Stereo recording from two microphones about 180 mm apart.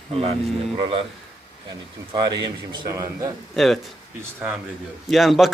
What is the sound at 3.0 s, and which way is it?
Speech, 15° right (ahead or behind).